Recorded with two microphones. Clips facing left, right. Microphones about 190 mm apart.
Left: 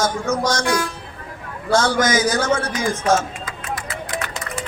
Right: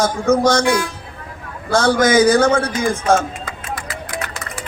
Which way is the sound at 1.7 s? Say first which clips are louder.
Right 4 dB; 60° right (ahead or behind).